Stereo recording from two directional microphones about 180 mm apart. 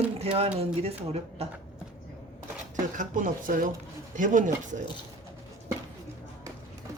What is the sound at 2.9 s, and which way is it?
Speech, 45° right (ahead or behind).